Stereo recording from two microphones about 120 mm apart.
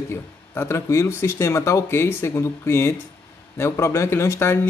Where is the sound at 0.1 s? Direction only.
20° left (ahead or behind).